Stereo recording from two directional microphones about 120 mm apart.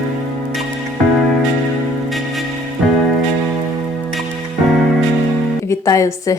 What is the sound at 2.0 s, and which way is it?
Music, centre (ahead or behind).